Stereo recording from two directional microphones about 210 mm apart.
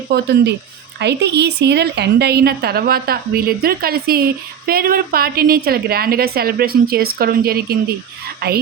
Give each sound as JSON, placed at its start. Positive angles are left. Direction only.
{"t": 0.1, "sound": "a woman's voice", "side_deg": -50}